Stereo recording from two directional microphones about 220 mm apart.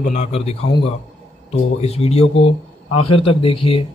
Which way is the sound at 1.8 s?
30° left (ahead or behind).